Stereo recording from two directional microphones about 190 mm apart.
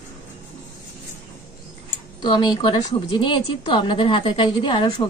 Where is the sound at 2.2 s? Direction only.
25° left (ahead or behind).